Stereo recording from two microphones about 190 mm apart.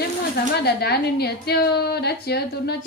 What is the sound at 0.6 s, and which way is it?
A woman's voice, 55° left (ahead or behind).